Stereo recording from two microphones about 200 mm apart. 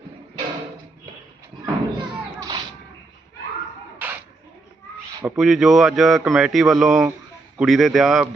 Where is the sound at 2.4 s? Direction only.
20° right (ahead or behind).